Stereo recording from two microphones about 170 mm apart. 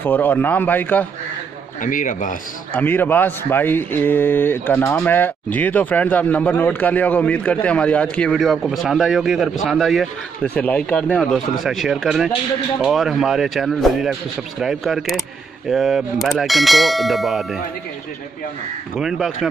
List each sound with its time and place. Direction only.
0.0 s speech: 10° left (ahead or behind)
1.8 s a man's voice: 50° left (ahead or behind)
2.7 s speech: 10° left (ahead or behind)
9.7 s clang: centre (ahead or behind)
10.4 s speech: 10° left (ahead or behind)
11.3 s clang: centre (ahead or behind)
18.9 s clang: centre (ahead or behind)